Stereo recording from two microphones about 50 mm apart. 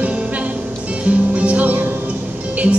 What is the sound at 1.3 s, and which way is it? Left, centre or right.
Music, right.